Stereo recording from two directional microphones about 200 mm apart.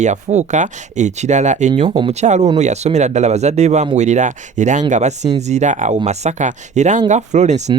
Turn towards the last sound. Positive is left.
turn(degrees=-35)  # may be behind; listen again after turning